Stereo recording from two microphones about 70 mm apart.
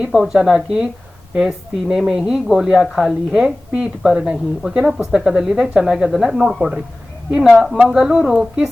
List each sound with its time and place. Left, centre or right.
0.0 s a woman's voice: centre
7.5 s speech: centre